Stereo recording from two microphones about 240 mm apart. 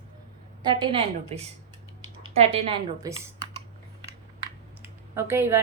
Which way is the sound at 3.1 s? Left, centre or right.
Centre.